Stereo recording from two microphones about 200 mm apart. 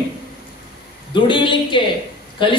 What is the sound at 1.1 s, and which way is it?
Speech, 25° left (ahead or behind).